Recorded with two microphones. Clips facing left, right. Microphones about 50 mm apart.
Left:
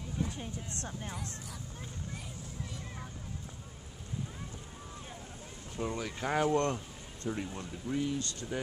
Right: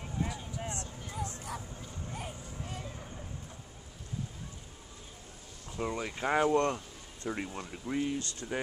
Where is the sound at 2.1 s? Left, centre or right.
Right.